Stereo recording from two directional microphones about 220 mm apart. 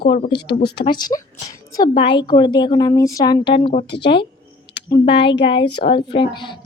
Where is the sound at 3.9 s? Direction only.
50° left (ahead or behind).